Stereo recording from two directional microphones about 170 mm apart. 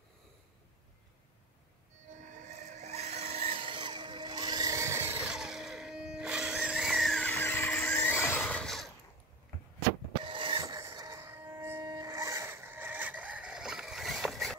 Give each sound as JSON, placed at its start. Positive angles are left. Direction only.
{"t": 2.4, "sound": "vehicle", "side_deg": -45}
{"t": 10.2, "sound": "music", "side_deg": -30}